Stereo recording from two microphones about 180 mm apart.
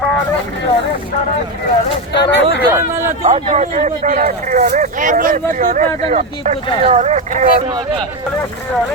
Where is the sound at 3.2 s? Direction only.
35° right (ahead or behind).